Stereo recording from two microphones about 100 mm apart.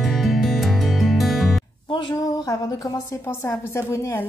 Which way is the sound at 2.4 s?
35° left (ahead or behind).